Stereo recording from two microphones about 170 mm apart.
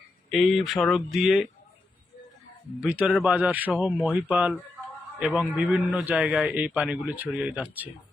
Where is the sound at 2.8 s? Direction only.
10° right (ahead or behind).